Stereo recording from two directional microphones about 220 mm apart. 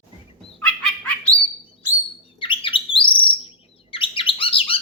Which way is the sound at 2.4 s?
25° left (ahead or behind).